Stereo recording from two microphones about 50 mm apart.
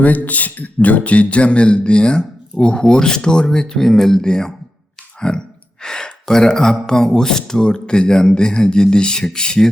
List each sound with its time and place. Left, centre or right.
0.0 s speech: left; by 9.6 s centre